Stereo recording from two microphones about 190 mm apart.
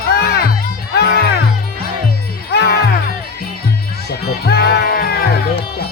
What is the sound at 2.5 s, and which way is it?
Music, 60° left (ahead or behind).